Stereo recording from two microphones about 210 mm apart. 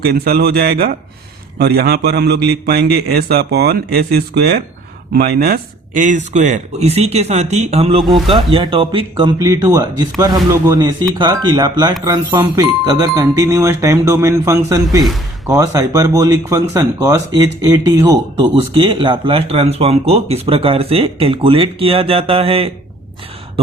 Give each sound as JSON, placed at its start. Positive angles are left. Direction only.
{"t": 0.0, "sound": "a man's voice", "side_deg": -50}